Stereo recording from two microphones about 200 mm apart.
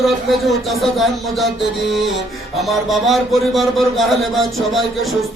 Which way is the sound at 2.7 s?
Centre (ahead or behind).